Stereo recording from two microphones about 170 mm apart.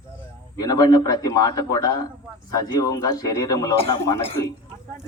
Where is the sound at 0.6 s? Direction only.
25° left (ahead or behind).